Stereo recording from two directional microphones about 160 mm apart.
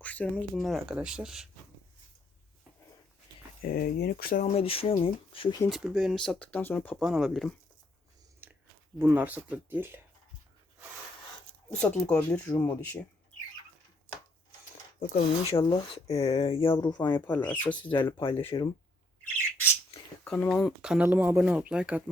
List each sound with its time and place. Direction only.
0.0 s speech: 10° left (ahead or behind)
3.6 s speech: 65° left (ahead or behind)
4.5 s speech: 35° left (ahead or behind)
5.6 s speech: centre (ahead or behind)
7.0 s speech: centre (ahead or behind)
9.0 s speech: 10° right (ahead or behind)
11.8 s speech: 5° left (ahead or behind)
14.9 s speech: 70° left (ahead or behind)
15.4 s speech: 35° left (ahead or behind)
17.2 s speech: 10° left (ahead or behind)
18.2 s speech: 30° left (ahead or behind)
20.2 s speech: 5° left (ahead or behind)
20.7 s speech: 5° right (ahead or behind)